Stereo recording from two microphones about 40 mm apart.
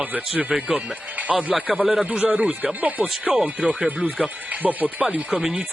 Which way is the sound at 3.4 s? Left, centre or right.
Right.